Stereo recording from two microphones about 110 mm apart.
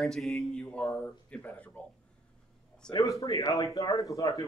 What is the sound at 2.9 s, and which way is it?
Speech, 30° left (ahead or behind).